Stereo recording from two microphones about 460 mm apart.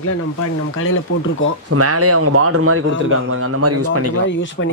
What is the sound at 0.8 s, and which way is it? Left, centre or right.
Speech, left.